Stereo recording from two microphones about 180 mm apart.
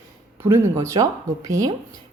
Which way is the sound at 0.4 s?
15° right (ahead or behind).